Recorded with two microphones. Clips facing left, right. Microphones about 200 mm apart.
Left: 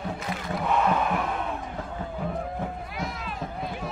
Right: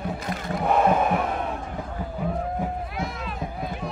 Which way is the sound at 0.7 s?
45° right (ahead or behind).